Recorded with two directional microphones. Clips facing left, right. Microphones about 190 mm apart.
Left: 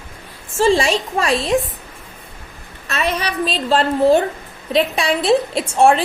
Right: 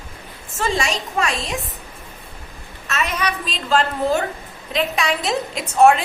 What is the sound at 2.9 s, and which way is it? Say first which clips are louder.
A woman's voice: left 2 dB; 35° left (ahead or behind).